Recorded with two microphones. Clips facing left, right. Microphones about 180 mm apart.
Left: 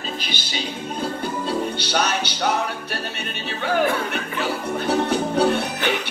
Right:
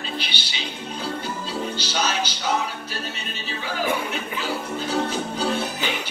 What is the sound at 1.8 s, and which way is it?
Music, 60° left (ahead or behind).